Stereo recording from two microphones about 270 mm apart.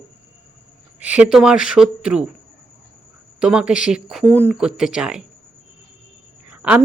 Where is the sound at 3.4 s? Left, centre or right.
Centre.